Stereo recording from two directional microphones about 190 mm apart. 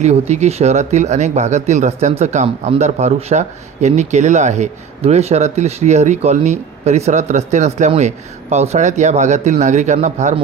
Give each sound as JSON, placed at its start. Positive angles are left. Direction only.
{"t": 0.0, "sound": "speech", "side_deg": -35}